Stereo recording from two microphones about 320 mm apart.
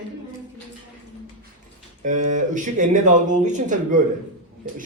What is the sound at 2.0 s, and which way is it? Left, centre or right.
Speech, right.